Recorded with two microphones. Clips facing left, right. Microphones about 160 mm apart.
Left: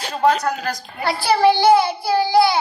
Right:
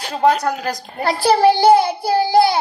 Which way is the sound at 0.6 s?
40° right (ahead or behind).